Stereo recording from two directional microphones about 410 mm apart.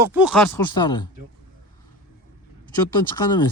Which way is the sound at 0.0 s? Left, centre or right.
Centre.